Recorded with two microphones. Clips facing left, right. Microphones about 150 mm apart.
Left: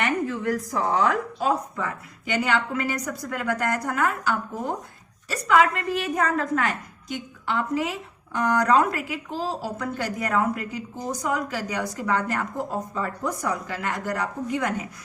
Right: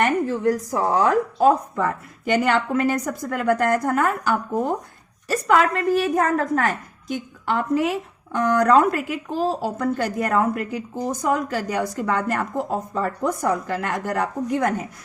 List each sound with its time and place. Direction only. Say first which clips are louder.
0.0 s a woman's voice: right 5 dB; 35° right (ahead or behind)